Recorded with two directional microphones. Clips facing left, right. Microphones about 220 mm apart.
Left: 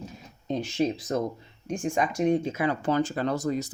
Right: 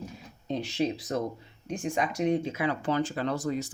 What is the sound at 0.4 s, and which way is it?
Speech, 45° left (ahead or behind).